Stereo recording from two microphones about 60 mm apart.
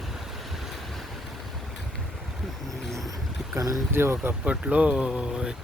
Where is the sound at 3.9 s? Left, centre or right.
Right.